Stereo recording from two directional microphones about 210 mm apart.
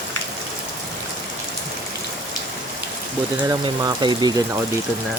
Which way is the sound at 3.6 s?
20° right (ahead or behind).